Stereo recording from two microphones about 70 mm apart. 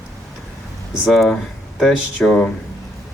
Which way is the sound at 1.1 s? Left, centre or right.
Centre.